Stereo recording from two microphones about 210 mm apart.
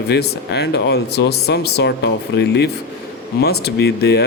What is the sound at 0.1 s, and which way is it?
Speech, 50° left (ahead or behind).